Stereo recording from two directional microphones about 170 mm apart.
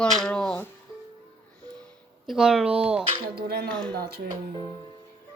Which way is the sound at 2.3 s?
5° right (ahead or behind).